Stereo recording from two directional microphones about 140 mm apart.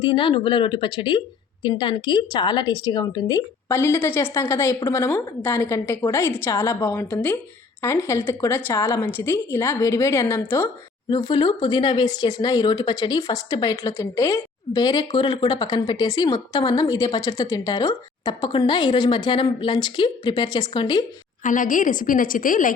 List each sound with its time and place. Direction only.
0.0 s a woman's voice: 35° left (ahead or behind); by 10.7 s 20° left (ahead or behind)
11.1 s speech: 35° left (ahead or behind)
21.4 s a woman's voice: 70° left (ahead or behind)